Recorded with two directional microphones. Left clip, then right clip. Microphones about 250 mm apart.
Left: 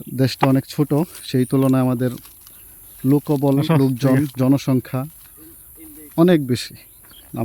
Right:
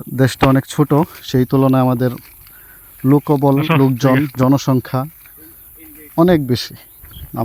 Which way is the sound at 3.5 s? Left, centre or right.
Centre.